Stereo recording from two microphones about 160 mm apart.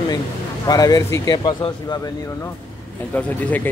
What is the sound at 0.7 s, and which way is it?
Speech, 25° left (ahead or behind).